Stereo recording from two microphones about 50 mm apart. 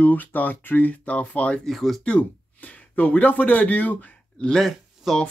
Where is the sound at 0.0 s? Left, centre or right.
Left.